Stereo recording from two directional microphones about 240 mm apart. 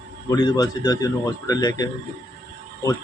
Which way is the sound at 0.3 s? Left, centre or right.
Centre.